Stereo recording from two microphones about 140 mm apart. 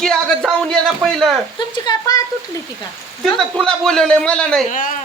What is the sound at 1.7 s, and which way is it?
Speech, 30° left (ahead or behind).